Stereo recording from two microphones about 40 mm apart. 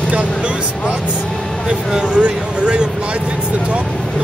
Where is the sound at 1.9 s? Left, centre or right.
Right.